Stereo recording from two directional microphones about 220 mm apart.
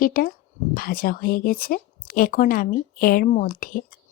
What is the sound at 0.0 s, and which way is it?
Speech, 40° left (ahead or behind).